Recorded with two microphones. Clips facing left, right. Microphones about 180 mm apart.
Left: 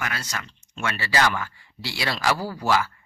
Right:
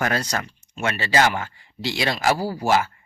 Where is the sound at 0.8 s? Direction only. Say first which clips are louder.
Right 3 dB; 25° right (ahead or behind).